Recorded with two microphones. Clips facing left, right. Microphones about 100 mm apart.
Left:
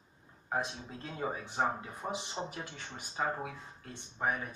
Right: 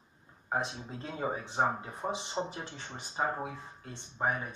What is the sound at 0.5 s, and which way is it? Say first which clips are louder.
Speech: right 2 dB; 20° right (ahead or behind).